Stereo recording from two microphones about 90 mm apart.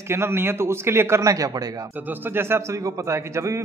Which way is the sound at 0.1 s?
25° right (ahead or behind).